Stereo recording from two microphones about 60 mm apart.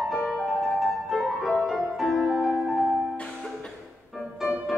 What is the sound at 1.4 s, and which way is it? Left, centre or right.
Music, centre.